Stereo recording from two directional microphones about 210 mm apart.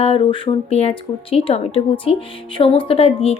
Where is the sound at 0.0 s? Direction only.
25° left (ahead or behind).